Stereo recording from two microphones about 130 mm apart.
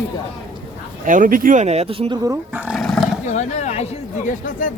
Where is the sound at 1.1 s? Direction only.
90° right.